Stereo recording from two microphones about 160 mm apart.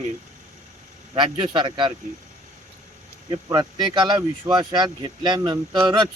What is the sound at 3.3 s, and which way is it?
Speech, 25° right (ahead or behind).